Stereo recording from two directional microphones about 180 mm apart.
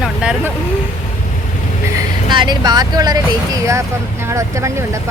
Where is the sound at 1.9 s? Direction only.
25° right (ahead or behind).